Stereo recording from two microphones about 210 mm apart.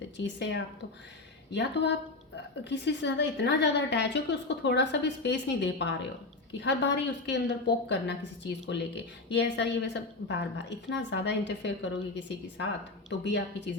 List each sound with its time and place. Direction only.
0.2 s a woman's voice: 55° left (ahead or behind)